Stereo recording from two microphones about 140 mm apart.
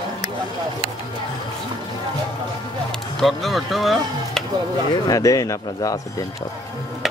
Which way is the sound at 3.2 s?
Centre (ahead or behind).